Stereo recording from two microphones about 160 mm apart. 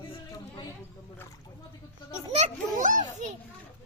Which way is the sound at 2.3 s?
50° right (ahead or behind).